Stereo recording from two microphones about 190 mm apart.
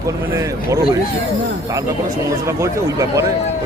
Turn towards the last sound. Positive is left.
turn(degrees=-15)  # may be behind; listen again after turning